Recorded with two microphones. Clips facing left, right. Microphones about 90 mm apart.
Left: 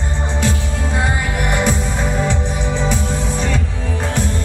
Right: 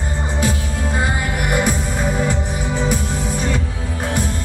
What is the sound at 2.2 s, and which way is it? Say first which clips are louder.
Music: left 1 dB; 5° right (ahead or behind).